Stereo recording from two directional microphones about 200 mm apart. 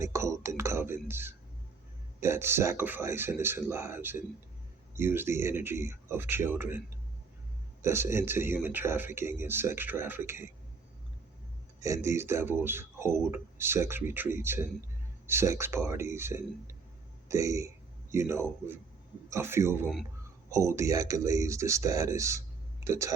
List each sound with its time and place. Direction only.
0.0 s speech: 15° right (ahead or behind)
11.8 s speech: 15° right (ahead or behind)